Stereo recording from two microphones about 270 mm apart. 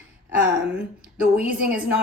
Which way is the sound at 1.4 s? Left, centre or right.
Centre.